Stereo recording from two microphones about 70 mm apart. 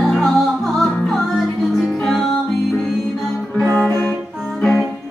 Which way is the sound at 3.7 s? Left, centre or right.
Centre.